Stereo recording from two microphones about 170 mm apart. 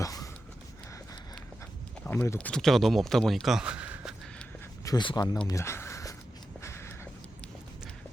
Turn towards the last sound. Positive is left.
turn(degrees=15)  # may be behind; listen again after turning